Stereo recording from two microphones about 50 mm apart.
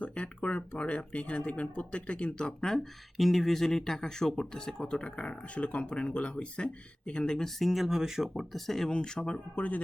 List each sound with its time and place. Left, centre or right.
0.0 s speech: left
2.6 s speech: centre
9.6 s speech: left